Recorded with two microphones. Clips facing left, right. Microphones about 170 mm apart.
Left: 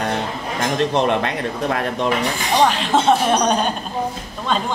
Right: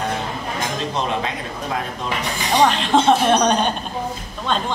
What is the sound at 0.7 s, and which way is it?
Speech, 65° left (ahead or behind).